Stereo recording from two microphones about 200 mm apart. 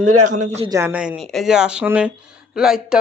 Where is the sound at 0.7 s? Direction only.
10° right (ahead or behind).